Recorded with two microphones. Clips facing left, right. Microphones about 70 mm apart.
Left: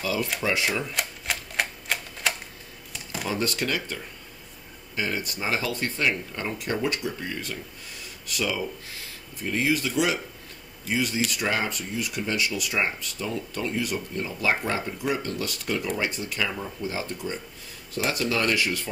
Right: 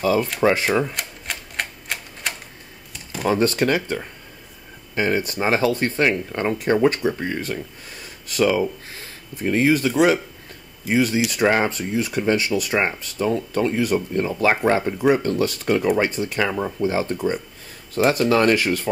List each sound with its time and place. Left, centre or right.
0.0 s speech: right
0.9 s typewriter: centre
2.9 s a sound: centre
3.3 s speech: right